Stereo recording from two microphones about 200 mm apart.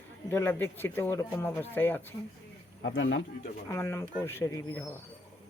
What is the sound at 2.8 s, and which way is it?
Speech, 65° left (ahead or behind).